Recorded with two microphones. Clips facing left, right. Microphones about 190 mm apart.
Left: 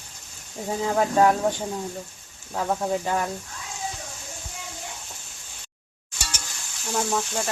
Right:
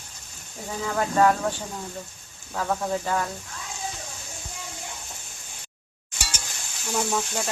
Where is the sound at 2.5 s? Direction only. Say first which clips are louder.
Left 1 dB; 15° left (ahead or behind).